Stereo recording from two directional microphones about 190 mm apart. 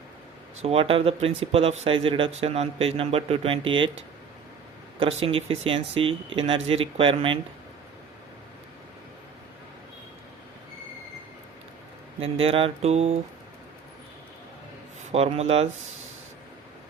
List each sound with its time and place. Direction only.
0.6 s speech: 30° right (ahead or behind)
5.2 s speech: 30° right (ahead or behind)
12.2 s speech: 30° right (ahead or behind)
15.1 s speech: 35° right (ahead or behind)